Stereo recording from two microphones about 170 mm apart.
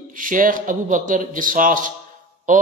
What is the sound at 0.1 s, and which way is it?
Speech, 50° right (ahead or behind).